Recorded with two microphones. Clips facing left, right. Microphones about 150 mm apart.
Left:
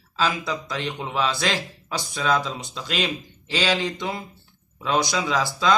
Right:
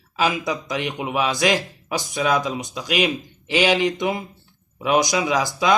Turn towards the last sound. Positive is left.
turn(degrees=-15)  # may be behind; listen again after turning